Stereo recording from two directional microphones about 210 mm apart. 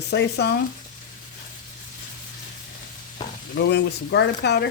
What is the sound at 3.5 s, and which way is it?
Speech, 50° left (ahead or behind).